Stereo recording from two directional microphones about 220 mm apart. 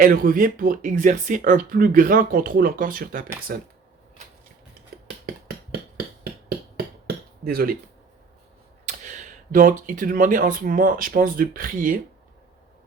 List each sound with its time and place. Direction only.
0.0 s speech: 40° right (ahead or behind)
7.4 s speech: 40° right (ahead or behind)
8.9 s speech: 35° right (ahead or behind)